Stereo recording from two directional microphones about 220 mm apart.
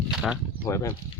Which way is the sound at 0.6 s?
15° left (ahead or behind).